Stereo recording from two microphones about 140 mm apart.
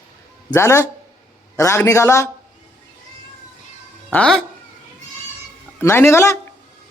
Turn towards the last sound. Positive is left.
turn(degrees=20)  # may be behind; listen again after turning